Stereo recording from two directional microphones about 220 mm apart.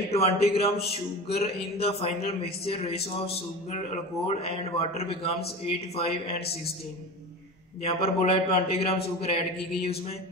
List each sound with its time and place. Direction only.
0.1 s a man's voice: 25° left (ahead or behind)
7.8 s a man's voice: 25° left (ahead or behind)